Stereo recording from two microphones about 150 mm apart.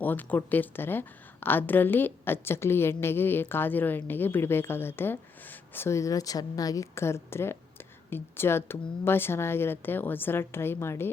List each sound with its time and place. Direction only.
0.0 s a woman's voice: 10° left (ahead or behind)